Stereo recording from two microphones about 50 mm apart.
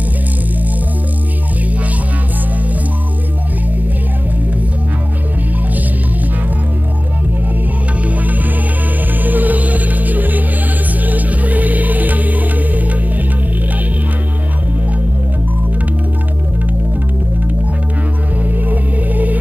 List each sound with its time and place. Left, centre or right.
8.0 s music: right
18.4 s music: right